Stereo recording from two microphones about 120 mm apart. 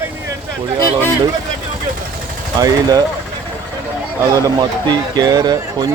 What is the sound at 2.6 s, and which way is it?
Speech, 30° right (ahead or behind).